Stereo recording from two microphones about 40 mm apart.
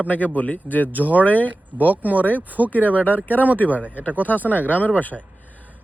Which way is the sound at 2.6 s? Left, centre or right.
Left.